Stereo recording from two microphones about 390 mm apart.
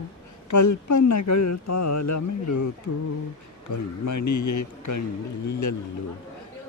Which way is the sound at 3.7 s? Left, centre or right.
Left.